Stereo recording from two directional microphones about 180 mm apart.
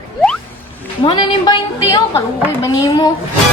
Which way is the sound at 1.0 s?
25° left (ahead or behind).